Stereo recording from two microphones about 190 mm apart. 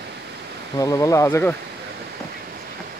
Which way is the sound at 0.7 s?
15° left (ahead or behind).